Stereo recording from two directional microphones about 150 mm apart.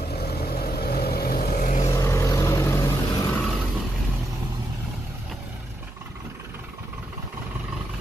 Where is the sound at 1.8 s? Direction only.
20° left (ahead or behind).